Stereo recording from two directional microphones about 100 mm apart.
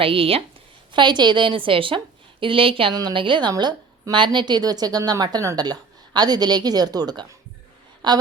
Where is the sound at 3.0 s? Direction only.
50° right (ahead or behind).